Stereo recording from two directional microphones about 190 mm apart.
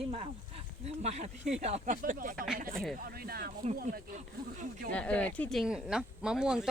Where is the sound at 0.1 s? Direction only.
30° right (ahead or behind); by 4.0 s 45° right (ahead or behind).